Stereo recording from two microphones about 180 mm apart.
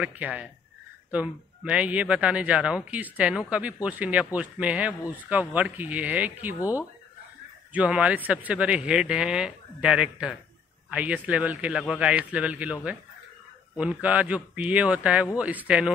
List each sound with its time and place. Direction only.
0.0 s speech: 5° right (ahead or behind)
6.6 s speech: 15° left (ahead or behind)
7.7 s speech: 5° right (ahead or behind)
13.7 s speech: 5° right (ahead or behind)